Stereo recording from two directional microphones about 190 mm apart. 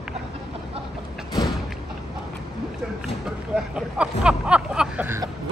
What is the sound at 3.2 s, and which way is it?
Vehicle, 5° right (ahead or behind).